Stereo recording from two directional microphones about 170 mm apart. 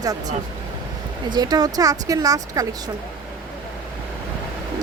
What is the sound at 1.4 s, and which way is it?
Speech, 25° right (ahead or behind).